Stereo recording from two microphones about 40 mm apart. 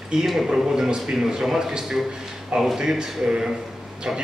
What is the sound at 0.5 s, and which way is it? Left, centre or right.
A man's voice, centre.